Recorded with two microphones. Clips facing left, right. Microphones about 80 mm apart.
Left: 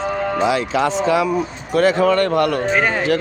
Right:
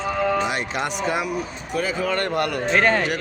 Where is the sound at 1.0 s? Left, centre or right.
Left.